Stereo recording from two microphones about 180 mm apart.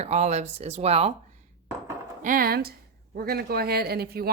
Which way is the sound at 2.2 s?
50° right (ahead or behind).